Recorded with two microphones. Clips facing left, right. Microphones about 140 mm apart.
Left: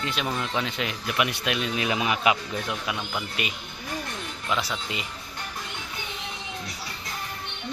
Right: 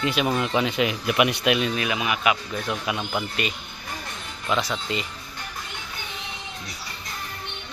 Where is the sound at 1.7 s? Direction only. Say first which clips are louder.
Even; 30° left (ahead or behind).